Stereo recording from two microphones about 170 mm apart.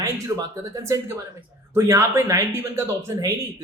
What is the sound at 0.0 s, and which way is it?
Speech, 20° right (ahead or behind).